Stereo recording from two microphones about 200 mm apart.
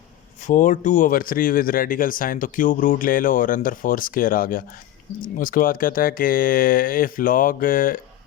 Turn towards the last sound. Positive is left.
turn(degrees=45)  # may be behind; listen again after turning